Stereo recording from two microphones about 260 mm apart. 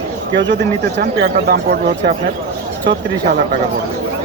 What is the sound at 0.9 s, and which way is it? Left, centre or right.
Speech, right.